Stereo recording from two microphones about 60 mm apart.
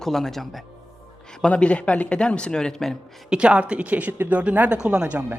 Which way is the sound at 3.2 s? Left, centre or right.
Centre.